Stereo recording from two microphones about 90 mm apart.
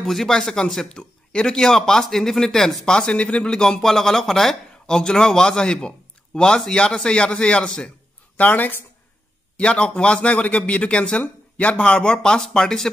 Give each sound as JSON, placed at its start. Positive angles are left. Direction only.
{"t": 0.0, "sound": "a man's voice", "side_deg": 5}